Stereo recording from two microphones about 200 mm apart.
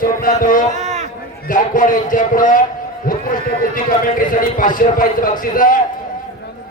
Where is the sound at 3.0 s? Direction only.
45° left (ahead or behind).